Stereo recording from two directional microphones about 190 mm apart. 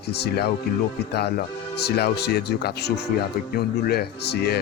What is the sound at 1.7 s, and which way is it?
Speech, 60° left (ahead or behind).